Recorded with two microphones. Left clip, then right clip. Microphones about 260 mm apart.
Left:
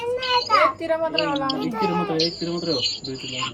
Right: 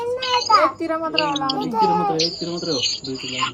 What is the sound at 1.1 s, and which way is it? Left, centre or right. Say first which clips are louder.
Speech: right 2 dB; right.